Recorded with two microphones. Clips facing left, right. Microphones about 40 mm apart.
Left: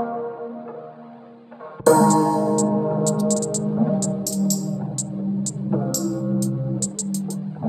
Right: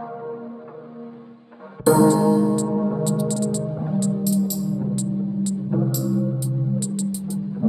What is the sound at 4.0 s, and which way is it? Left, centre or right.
Music, centre.